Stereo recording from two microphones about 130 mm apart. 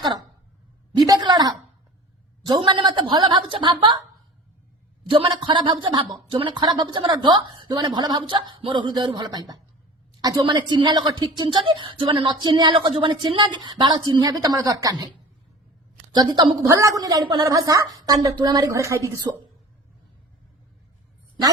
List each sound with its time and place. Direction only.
0.0 s speech: 35° right (ahead or behind)
0.9 s a sound: 30° right (ahead or behind)
2.5 s a woman's voice: 35° right (ahead or behind)
5.0 s a woman's voice: 40° right (ahead or behind)
16.1 s a woman's voice: 35° right (ahead or behind)